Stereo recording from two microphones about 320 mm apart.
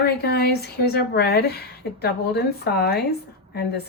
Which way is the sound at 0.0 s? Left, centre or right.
Left.